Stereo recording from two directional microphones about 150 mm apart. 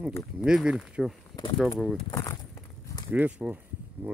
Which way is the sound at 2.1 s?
25° left (ahead or behind).